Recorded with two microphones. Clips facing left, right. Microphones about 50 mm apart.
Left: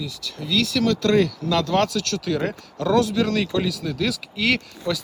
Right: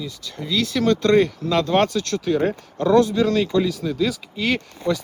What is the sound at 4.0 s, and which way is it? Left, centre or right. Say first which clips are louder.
Speech: right 1 dB; left.